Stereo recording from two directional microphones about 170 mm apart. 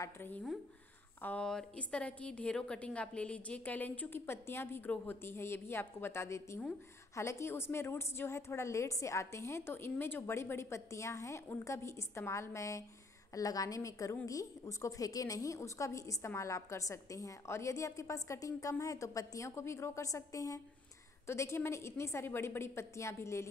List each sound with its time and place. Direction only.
0.0 s a woman's voice: 10° left (ahead or behind)